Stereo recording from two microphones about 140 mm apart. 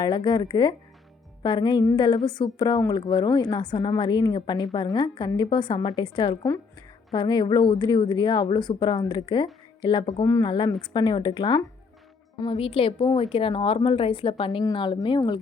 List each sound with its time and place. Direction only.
0.0 s a woman's voice: 35° left (ahead or behind)
10.2 s a woman's voice: 20° left (ahead or behind)
10.8 s a woman's voice: 35° left (ahead or behind)